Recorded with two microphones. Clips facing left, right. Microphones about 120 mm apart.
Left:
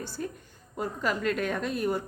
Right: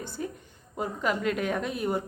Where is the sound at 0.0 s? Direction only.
20° right (ahead or behind).